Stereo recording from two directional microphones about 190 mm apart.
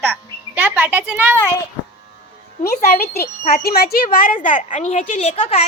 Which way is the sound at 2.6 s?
55° left (ahead or behind).